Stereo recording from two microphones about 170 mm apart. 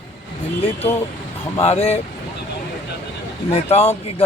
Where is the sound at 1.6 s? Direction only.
35° left (ahead or behind).